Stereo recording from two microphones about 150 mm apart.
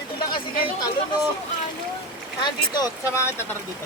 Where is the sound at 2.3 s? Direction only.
30° left (ahead or behind).